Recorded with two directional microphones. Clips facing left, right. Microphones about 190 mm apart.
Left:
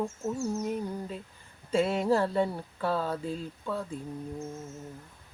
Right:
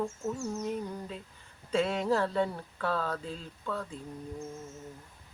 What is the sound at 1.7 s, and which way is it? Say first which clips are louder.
Humming: left 3 dB; 10° left (ahead or behind).